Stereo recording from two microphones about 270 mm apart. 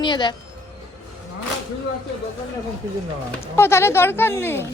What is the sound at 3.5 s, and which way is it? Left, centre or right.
Speech, centre.